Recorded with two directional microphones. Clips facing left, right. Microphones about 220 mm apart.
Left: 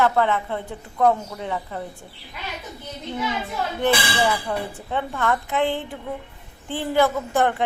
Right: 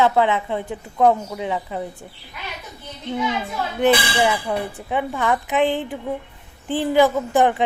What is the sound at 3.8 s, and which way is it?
A woman's voice, 15° right (ahead or behind).